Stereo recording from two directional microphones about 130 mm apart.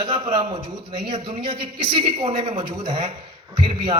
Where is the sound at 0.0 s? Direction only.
40° right (ahead or behind).